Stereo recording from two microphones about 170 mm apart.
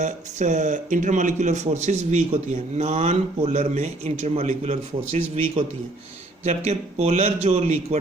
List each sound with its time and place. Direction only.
0.0 s a man's voice: 45° right (ahead or behind)